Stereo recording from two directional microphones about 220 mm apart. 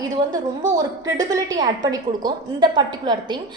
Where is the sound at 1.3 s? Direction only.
15° right (ahead or behind).